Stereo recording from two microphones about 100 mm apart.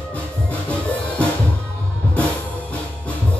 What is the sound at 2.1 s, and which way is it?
Drum kit, 15° left (ahead or behind).